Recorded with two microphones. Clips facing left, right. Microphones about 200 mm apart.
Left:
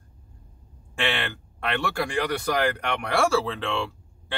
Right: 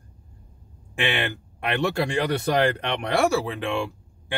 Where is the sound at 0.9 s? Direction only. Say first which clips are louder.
Right 2 dB; 20° right (ahead or behind).